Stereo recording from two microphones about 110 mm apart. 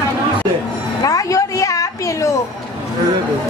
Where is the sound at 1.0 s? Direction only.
30° left (ahead or behind).